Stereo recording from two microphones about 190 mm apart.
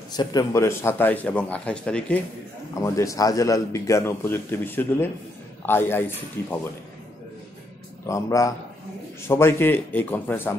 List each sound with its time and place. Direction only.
0.1 s a man's voice: 20° left (ahead or behind); by 2.1 s 5° left (ahead or behind)
2.7 s a man's voice: 15° left (ahead or behind)
8.1 s a man's voice: 15° left (ahead or behind)